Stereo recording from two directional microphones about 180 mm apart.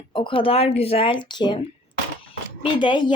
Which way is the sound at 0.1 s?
30° left (ahead or behind).